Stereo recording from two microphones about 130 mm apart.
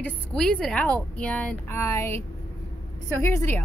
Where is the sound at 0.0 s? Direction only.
5° left (ahead or behind).